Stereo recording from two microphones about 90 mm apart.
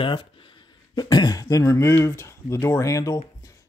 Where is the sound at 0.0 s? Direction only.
70° left (ahead or behind).